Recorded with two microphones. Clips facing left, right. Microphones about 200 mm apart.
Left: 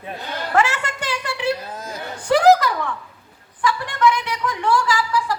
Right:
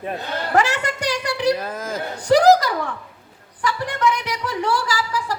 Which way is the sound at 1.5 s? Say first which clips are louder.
Right 5 dB; 90° right.